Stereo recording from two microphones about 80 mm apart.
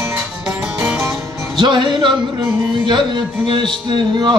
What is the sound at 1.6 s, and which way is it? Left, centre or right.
Music, right.